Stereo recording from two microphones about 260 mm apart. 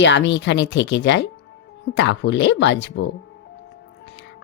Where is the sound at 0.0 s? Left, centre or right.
Left.